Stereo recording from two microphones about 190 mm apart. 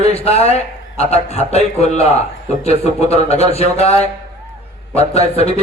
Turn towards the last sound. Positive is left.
turn(degrees=30)  # may be behind; listen again after turning